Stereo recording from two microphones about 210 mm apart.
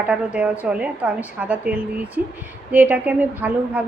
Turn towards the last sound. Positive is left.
turn(degrees=-5)  # may be behind; listen again after turning